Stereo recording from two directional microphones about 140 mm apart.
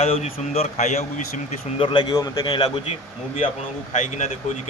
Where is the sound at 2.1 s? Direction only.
25° left (ahead or behind).